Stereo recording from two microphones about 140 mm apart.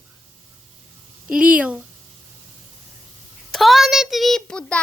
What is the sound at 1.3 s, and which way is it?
Speech, 10° right (ahead or behind).